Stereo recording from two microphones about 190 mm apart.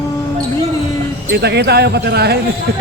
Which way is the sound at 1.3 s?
60° right (ahead or behind).